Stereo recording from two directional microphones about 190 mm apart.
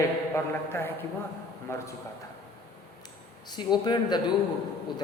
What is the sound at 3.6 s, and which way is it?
Speech, 20° left (ahead or behind).